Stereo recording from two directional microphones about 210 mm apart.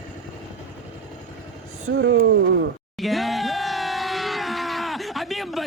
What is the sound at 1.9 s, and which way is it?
Speech, 60° right (ahead or behind).